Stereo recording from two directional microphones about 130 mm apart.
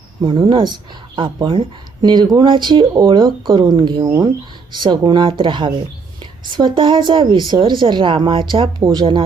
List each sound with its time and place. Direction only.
0.3 s speech: 40° right (ahead or behind)